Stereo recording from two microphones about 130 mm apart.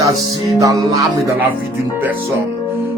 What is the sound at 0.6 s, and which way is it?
Music, 25° right (ahead or behind).